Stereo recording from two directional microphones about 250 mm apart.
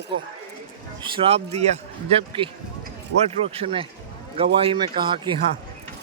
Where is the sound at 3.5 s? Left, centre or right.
Right.